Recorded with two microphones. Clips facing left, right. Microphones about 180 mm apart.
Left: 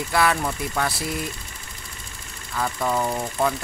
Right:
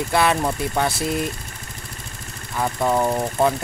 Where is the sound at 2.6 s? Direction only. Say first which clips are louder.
Right 4 dB; 25° right (ahead or behind).